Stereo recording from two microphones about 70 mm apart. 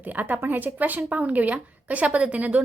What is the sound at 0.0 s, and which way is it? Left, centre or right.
A woman's voice, right.